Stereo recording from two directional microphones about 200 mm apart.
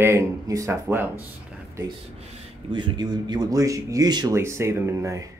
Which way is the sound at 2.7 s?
20° right (ahead or behind).